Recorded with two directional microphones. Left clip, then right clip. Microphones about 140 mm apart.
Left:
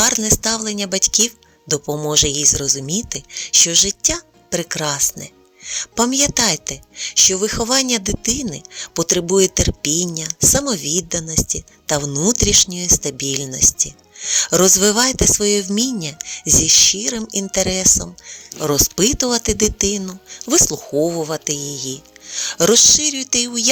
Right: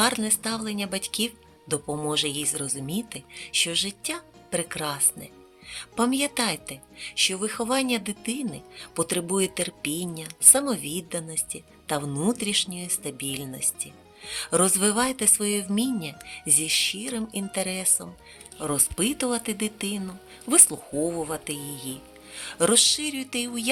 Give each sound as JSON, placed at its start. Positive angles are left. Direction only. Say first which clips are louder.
{"t": 0.0, "sound": "speech", "louder": "left 8 dB", "side_deg": 50}